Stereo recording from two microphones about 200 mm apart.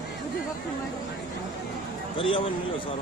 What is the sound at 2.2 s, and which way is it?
Speech, 25° left (ahead or behind).